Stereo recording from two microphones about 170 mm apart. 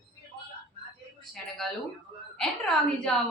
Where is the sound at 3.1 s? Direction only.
5° left (ahead or behind).